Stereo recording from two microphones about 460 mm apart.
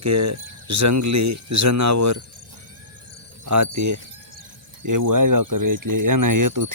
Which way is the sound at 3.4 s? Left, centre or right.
Right.